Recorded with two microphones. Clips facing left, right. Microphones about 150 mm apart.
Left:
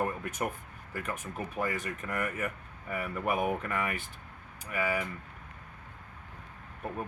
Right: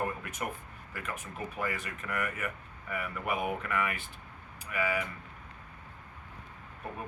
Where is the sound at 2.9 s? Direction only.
35° left (ahead or behind).